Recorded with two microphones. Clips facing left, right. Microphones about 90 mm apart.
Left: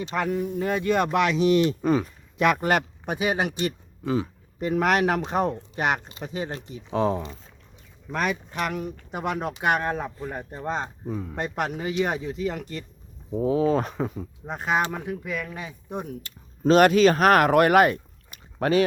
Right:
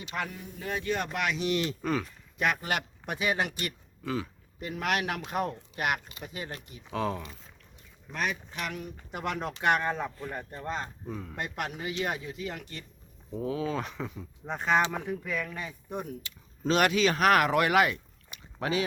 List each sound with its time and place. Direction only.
0.0 s speech: 40° left (ahead or behind); by 1.3 s 75° left (ahead or behind)
1.6 s speech: 20° left (ahead or behind)
2.6 s speech: 40° left (ahead or behind)
3.1 s speech: 20° left (ahead or behind)
4.6 s speech: 40° left (ahead or behind)
8.1 s speech: 50° left (ahead or behind)
9.1 s speech: 15° left (ahead or behind)
10.7 s speech: 25° left (ahead or behind)
11.1 s speech: 15° left (ahead or behind)
11.3 s speech: 35° left (ahead or behind)
14.4 s speech: 10° left (ahead or behind)
16.2 s speech: 45° left (ahead or behind)